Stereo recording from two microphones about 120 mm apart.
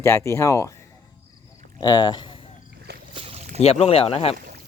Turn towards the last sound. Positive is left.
turn(degrees=55)  # may be behind; listen again after turning